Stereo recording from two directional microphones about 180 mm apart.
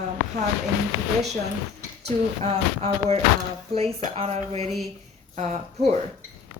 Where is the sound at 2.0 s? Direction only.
35° right (ahead or behind).